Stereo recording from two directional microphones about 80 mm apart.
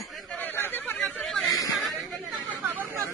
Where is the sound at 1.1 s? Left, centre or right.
Centre.